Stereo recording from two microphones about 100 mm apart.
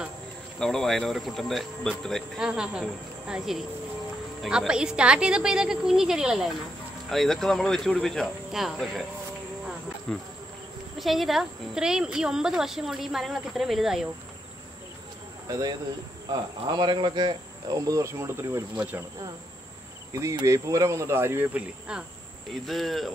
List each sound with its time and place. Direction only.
0.6 s speech: 5° left (ahead or behind)
2.3 s a woman's voice: 5° right (ahead or behind)
10.1 s speech: 5° left (ahead or behind)
15.4 s speech: 40° right (ahead or behind)
17.6 s cricket: 35° right (ahead or behind)
18.8 s a woman's voice: 15° right (ahead or behind)
20.1 s speech: 30° right (ahead or behind)
21.5 s a woman's voice: 10° right (ahead or behind)
22.5 s speech: centre (ahead or behind)